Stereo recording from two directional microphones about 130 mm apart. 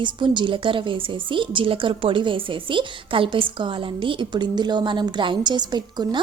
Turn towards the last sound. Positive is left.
turn(degrees=-35)  # may be behind; listen again after turning